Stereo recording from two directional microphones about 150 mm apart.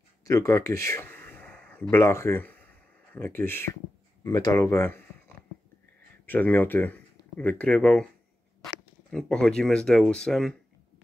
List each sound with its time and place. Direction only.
0.2 s speech: 20° left (ahead or behind)
6.2 s speech: 10° left (ahead or behind)
9.1 s speech: 5° left (ahead or behind)